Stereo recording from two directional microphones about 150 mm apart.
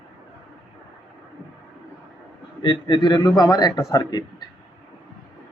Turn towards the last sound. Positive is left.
turn(degrees=25)  # may be behind; listen again after turning